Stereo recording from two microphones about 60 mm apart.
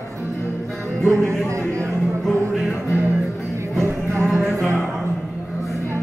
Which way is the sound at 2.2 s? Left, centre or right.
Centre.